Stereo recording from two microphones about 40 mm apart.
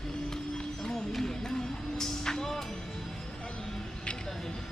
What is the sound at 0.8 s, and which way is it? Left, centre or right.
Music, centre.